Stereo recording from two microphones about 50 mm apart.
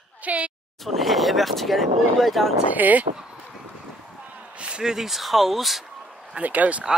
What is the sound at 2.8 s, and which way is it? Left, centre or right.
Speech, right.